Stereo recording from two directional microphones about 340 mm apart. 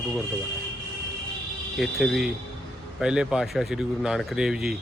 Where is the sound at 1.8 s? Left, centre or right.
Centre.